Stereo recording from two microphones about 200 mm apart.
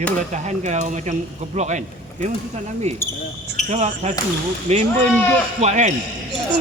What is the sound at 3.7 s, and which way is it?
Speech, 35° right (ahead or behind).